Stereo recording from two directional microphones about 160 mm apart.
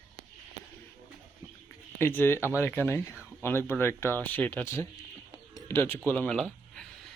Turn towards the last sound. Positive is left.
turn(degrees=5)  # may be behind; listen again after turning